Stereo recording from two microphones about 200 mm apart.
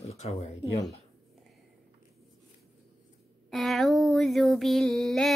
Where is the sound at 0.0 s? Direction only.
30° left (ahead or behind).